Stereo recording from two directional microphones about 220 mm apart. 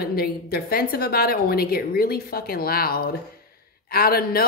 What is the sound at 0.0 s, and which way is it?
A woman's voice, 45° left (ahead or behind).